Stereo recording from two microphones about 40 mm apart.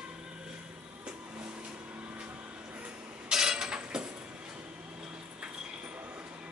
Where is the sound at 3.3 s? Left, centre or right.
Centre.